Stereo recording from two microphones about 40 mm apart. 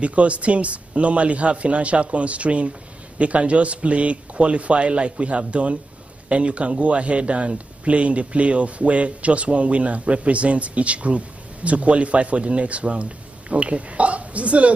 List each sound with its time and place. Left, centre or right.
0.0 s speech: right